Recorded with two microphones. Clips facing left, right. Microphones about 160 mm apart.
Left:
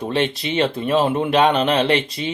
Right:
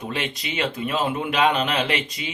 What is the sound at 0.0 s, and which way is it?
Speech, 30° left (ahead or behind).